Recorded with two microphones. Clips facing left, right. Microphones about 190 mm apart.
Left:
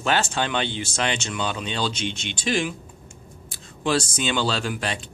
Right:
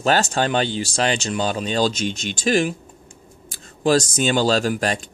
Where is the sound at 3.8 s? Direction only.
40° right (ahead or behind).